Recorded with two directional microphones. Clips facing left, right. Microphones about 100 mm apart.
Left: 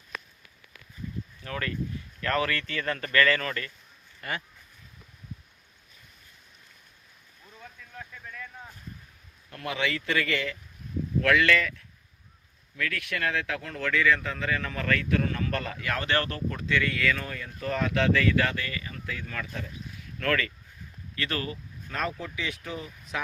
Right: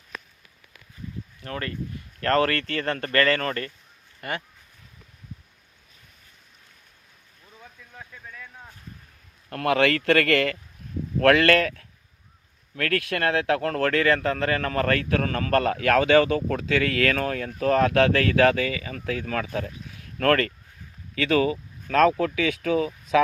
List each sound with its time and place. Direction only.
1.5 s speech: 40° right (ahead or behind)
2.2 s speech: 55° right (ahead or behind)
2.8 s speech: 45° right (ahead or behind)
7.6 s vehicle: 5° right (ahead or behind)
9.5 s a man's voice: 65° right (ahead or behind)
21.8 s speech: 90° right